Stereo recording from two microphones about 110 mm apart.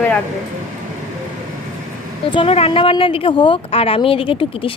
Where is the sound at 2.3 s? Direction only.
60° left (ahead or behind).